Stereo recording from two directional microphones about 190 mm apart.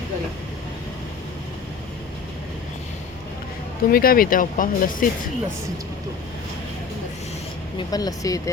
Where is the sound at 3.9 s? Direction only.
50° left (ahead or behind).